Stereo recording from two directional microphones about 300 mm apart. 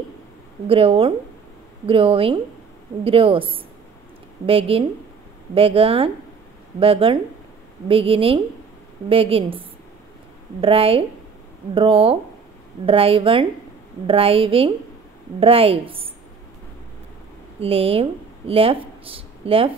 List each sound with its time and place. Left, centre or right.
0.7 s a woman's voice: centre
17.6 s speech: centre